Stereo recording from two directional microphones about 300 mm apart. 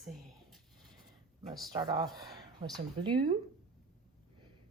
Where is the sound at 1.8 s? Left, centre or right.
Centre.